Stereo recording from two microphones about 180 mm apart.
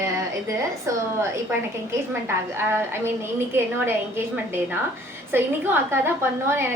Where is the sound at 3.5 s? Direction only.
15° right (ahead or behind).